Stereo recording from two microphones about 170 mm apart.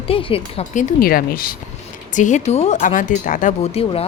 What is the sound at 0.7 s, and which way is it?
Speech, 45° left (ahead or behind).